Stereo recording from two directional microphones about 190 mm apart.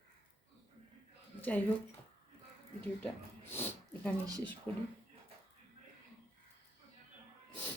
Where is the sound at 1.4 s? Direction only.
10° left (ahead or behind).